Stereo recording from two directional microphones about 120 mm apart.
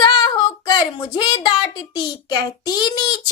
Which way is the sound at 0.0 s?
35° left (ahead or behind).